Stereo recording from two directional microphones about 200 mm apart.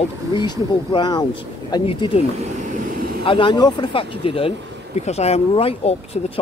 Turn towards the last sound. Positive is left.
turn(degrees=30)  # may be behind; listen again after turning